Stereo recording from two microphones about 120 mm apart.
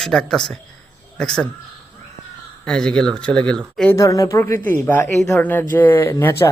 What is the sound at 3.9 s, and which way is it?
Speech, 25° left (ahead or behind).